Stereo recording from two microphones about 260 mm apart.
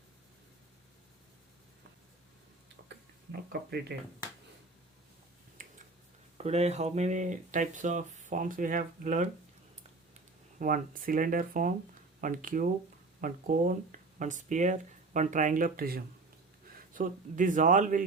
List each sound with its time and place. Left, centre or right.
3.5 s speech: right
5.6 s finger snapping: right
6.3 s speech: right
10.6 s speech: right